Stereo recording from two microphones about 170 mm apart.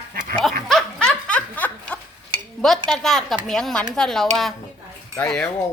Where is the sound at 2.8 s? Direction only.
5° left (ahead or behind).